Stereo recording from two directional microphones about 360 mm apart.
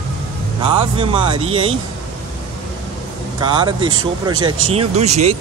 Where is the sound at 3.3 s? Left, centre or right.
Centre.